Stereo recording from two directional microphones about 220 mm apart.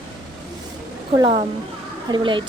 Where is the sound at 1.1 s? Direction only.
25° right (ahead or behind).